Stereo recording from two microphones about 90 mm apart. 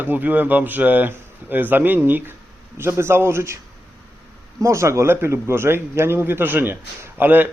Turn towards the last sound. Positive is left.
turn(degrees=-20)  # may be behind; listen again after turning